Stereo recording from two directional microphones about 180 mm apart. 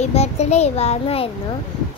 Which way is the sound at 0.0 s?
35° left (ahead or behind).